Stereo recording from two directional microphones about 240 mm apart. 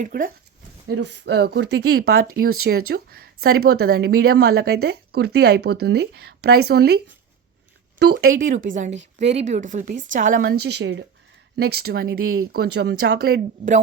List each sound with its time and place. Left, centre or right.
0.0 s speech: right
0.9 s speech: right